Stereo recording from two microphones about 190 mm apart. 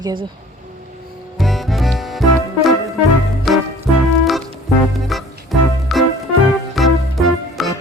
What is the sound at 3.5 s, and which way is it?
Music, centre (ahead or behind).